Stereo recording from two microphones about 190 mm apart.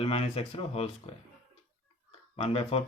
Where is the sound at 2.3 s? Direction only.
30° left (ahead or behind).